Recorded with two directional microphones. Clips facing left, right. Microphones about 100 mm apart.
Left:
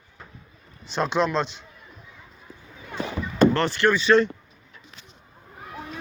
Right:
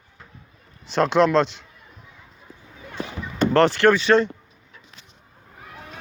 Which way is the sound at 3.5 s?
90° right.